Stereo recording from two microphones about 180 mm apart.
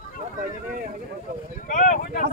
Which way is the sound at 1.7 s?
45° left (ahead or behind).